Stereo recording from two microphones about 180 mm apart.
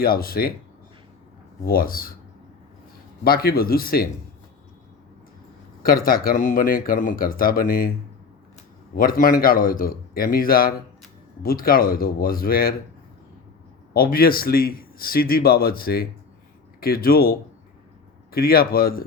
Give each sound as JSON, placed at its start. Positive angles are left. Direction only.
{"t": 0.0, "sound": "a man's voice", "side_deg": 55}
{"t": 1.6, "sound": "speech", "side_deg": 55}
{"t": 3.2, "sound": "a man's voice", "side_deg": 55}
{"t": 5.8, "sound": "speech", "side_deg": 55}
{"t": 9.0, "sound": "a man's voice", "side_deg": 50}
{"t": 13.9, "sound": "a man's voice", "side_deg": 55}